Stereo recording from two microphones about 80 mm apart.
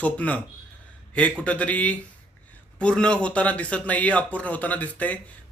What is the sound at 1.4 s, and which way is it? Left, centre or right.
Speech, centre.